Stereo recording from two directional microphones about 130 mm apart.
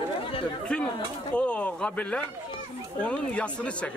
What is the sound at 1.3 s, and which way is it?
Speech, 10° left (ahead or behind).